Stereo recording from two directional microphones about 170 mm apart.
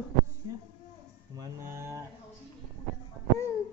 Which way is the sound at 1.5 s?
15° right (ahead or behind).